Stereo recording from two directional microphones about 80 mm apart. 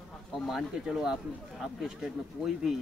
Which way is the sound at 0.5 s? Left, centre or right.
Centre.